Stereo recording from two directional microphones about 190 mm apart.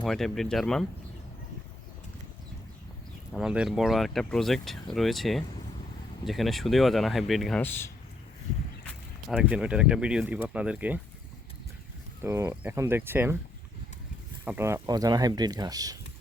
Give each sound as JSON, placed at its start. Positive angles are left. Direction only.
{"t": 0.0, "sound": "speech", "side_deg": 0}
{"t": 3.3, "sound": "speech", "side_deg": -5}
{"t": 9.3, "sound": "speech", "side_deg": -5}
{"t": 12.2, "sound": "speech", "side_deg": -15}
{"t": 14.4, "sound": "speech", "side_deg": -10}